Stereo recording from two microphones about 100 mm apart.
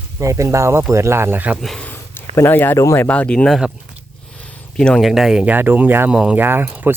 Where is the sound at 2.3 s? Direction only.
20° left (ahead or behind).